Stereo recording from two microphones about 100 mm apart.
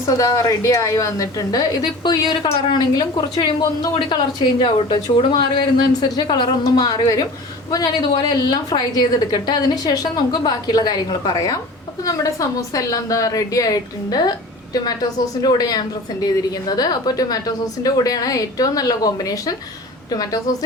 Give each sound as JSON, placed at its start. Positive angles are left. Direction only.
{"t": 0.2, "sound": "a woman's voice", "side_deg": 35}